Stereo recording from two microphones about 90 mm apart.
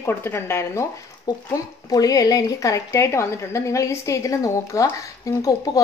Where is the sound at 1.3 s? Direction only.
45° left (ahead or behind).